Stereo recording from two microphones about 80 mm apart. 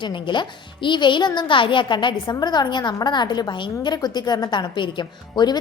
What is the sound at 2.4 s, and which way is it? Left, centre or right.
A woman's voice, left.